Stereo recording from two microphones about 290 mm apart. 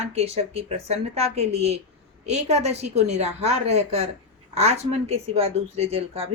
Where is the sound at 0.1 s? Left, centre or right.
Right.